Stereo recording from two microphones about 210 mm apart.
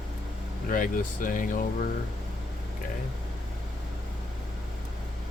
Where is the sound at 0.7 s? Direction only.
40° left (ahead or behind).